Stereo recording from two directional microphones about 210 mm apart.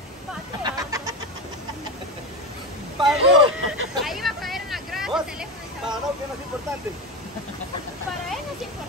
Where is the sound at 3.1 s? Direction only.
5° right (ahead or behind).